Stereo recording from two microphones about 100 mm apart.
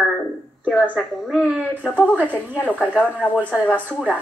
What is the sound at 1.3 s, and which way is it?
A woman's voice, 15° right (ahead or behind).